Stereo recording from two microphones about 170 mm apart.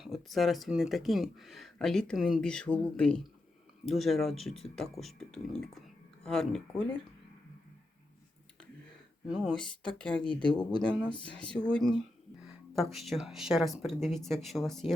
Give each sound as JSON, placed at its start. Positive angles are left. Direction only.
{"t": 0.0, "sound": "speech", "side_deg": 0}
{"t": 9.2, "sound": "speech", "side_deg": 0}
{"t": 10.5, "sound": "speech", "side_deg": 25}
{"t": 11.3, "sound": "speech", "side_deg": 5}